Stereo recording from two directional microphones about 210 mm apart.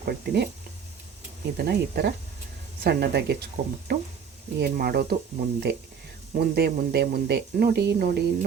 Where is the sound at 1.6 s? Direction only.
50° right (ahead or behind).